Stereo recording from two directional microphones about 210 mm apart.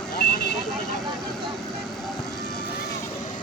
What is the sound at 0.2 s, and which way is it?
Vehicle, 50° left (ahead or behind).